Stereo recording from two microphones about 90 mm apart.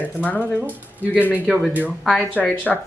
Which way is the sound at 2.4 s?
15° left (ahead or behind).